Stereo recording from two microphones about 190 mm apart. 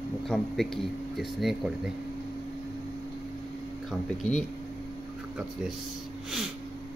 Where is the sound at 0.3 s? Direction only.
Centre (ahead or behind).